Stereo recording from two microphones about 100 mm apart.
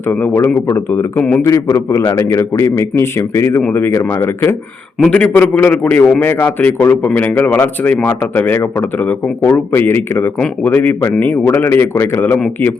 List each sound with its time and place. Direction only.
0.1 s a man's voice: 20° left (ahead or behind)
5.1 s a man's voice: 15° left (ahead or behind)